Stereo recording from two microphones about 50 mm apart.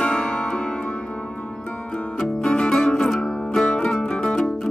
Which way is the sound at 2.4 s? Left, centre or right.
Centre.